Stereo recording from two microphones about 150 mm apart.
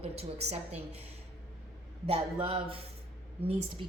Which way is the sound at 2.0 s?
40° right (ahead or behind).